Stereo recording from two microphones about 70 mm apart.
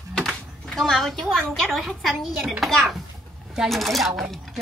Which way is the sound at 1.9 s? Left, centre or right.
Centre.